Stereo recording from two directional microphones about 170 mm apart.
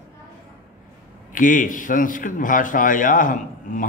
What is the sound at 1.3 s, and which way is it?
A man's voice, 50° left (ahead or behind).